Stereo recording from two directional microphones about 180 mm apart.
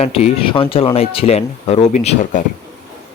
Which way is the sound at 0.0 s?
35° left (ahead or behind).